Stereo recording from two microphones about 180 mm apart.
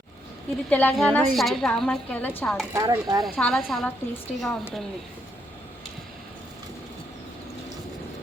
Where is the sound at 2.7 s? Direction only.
20° right (ahead or behind).